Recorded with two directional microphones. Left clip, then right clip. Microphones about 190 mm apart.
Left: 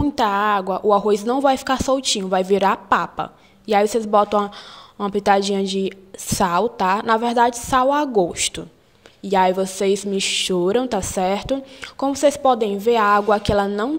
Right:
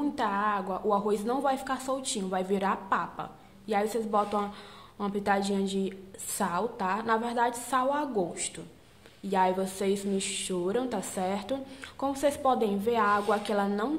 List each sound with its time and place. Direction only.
0.0 s a woman's voice: 45° left (ahead or behind)